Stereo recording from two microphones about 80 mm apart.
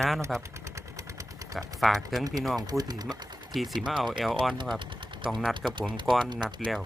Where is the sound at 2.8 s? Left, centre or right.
Right.